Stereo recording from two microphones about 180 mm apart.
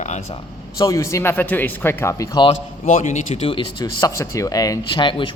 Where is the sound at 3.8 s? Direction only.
15° left (ahead or behind).